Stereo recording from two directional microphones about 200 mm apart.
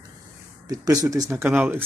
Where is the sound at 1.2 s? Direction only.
5° right (ahead or behind).